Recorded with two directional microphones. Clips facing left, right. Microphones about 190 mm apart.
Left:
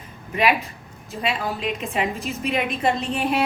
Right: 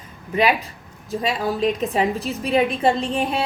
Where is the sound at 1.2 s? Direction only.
40° right (ahead or behind).